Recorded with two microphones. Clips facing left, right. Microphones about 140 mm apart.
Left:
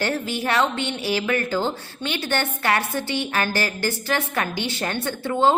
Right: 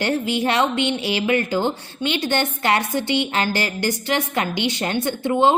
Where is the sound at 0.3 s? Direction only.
20° right (ahead or behind).